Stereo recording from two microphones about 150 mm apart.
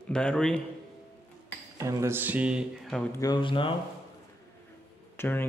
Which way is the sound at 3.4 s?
35° left (ahead or behind).